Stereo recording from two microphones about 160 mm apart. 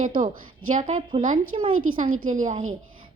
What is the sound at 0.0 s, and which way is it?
A woman's voice, 55° right (ahead or behind).